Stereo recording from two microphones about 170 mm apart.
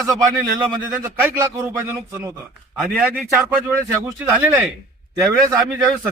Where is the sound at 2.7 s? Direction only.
Centre (ahead or behind).